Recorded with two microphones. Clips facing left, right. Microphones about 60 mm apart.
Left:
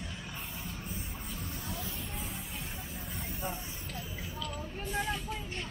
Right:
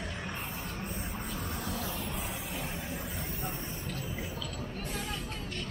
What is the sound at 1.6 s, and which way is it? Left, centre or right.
Vehicle, right.